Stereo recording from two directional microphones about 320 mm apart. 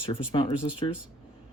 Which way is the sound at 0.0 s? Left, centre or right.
Centre.